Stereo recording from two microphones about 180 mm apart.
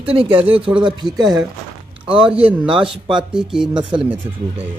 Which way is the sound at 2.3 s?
5° right (ahead or behind).